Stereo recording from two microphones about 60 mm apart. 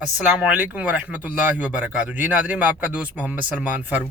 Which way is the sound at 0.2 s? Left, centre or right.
Centre.